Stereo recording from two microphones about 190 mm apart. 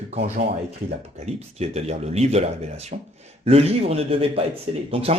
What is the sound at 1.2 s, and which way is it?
Speech, 35° right (ahead or behind).